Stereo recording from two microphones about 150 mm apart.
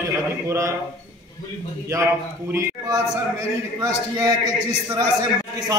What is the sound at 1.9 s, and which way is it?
A man's voice, 20° right (ahead or behind).